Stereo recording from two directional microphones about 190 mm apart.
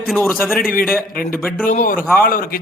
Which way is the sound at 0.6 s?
50° left (ahead or behind).